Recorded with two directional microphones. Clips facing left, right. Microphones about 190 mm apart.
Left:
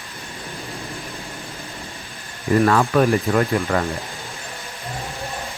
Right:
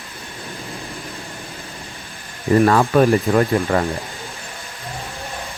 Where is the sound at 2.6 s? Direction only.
30° right (ahead or behind).